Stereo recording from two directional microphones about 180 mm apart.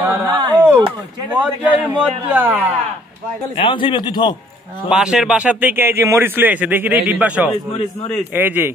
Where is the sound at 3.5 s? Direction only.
30° left (ahead or behind).